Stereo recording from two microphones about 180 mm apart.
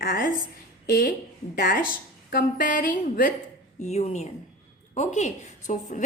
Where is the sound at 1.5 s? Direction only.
55° left (ahead or behind).